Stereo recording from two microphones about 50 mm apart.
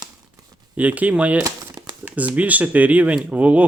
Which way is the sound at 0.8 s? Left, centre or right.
Right.